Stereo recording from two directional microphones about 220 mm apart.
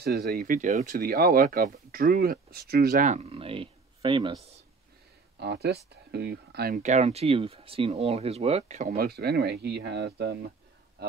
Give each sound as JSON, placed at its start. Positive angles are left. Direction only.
{"t": 0.0, "sound": "speech", "side_deg": -45}
{"t": 5.4, "sound": "speech", "side_deg": -50}